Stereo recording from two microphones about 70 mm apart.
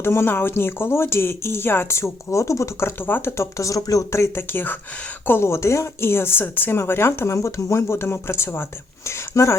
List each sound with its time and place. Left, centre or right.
0.0 s speech: left
3.1 s speech: left